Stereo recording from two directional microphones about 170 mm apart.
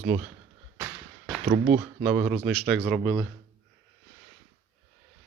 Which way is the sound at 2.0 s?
5° right (ahead or behind).